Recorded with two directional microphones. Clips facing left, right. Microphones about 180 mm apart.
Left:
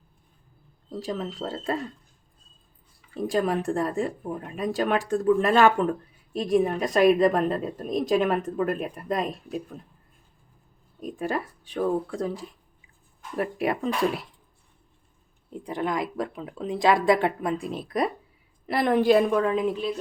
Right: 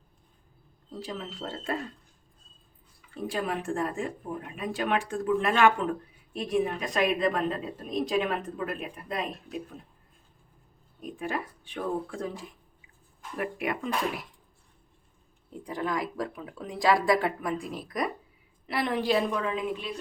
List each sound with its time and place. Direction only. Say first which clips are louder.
0.9 s speech: left 6 dB; 40° left (ahead or behind)
3.2 s a woman's voice: left 6 dB; 40° left (ahead or behind)
11.2 s speech: left 4 dB; 40° left (ahead or behind)
15.4 s speech: left 3 dB; 20° left (ahead or behind)
18.6 s a woman's voice: left 7 dB; 45° left (ahead or behind)